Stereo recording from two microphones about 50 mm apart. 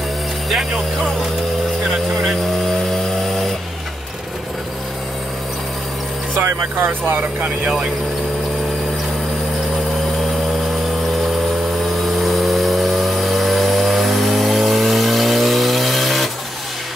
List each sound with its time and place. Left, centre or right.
6.4 s speech: right
12.1 s vehicle: centre